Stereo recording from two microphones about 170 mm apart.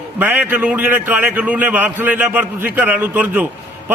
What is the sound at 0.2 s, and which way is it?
A man's voice, 10° right (ahead or behind).